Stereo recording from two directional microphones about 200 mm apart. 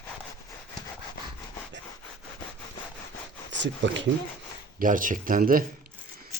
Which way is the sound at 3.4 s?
65° right (ahead or behind).